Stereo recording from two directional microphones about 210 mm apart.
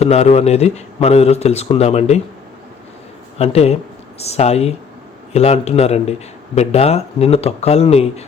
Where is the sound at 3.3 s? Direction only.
30° left (ahead or behind).